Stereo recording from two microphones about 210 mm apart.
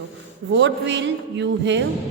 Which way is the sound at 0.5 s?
60° right (ahead or behind).